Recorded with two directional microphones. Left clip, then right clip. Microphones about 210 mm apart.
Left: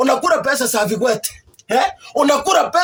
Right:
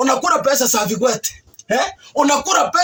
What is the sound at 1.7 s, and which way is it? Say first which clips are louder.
Speech: left 2 dB; 15° left (ahead or behind).